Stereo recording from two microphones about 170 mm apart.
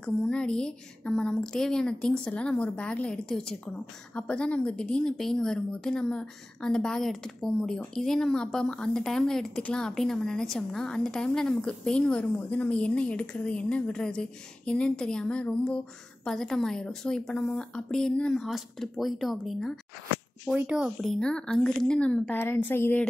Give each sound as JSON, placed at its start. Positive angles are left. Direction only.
{"t": 0.0, "sound": "a woman's voice", "side_deg": 5}